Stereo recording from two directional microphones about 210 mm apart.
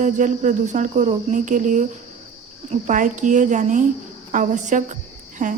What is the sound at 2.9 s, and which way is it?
Cricket, 35° right (ahead or behind).